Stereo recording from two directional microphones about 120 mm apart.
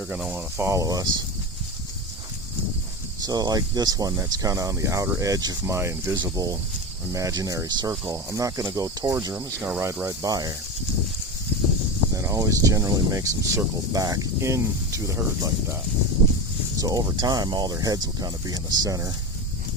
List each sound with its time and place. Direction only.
0.0 s speech: 10° right (ahead or behind); by 1.2 s 30° right (ahead or behind)
3.2 s speech: 35° right (ahead or behind)
9.3 s speech: 15° right (ahead or behind); by 10.5 s 30° right (ahead or behind)
12.1 s speech: 25° right (ahead or behind)